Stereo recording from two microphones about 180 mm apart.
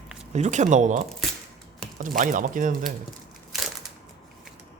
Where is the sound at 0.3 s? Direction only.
40° right (ahead or behind).